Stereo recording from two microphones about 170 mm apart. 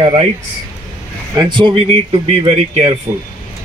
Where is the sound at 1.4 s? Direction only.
25° right (ahead or behind).